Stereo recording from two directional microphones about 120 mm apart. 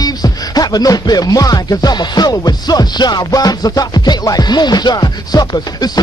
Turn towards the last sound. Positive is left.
turn(degrees=35)  # may be behind; listen again after turning